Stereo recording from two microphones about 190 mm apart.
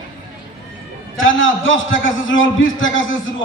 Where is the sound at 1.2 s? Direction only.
90° left.